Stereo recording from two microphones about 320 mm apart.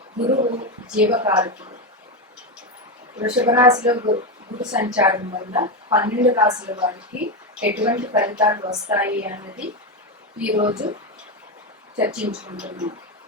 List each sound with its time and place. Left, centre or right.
0.2 s a woman's voice: centre
0.9 s a woman's voice: centre
3.2 s a woman's voice: centre
10.6 s a woman's voice: centre
11.9 s a woman's voice: centre